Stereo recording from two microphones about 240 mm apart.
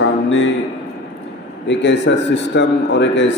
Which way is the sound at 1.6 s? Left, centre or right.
Left.